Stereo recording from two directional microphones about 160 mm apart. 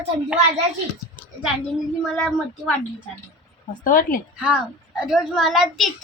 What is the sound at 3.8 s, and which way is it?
Speech, 60° left (ahead or behind).